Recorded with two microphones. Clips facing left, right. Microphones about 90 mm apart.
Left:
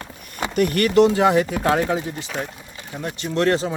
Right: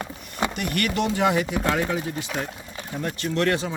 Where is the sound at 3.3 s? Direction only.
30° left (ahead or behind).